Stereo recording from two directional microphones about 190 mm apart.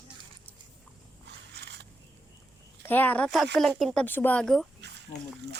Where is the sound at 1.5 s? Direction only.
65° right (ahead or behind).